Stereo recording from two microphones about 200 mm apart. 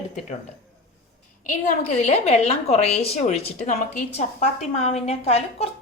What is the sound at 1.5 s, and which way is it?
A woman's voice, 35° left (ahead or behind).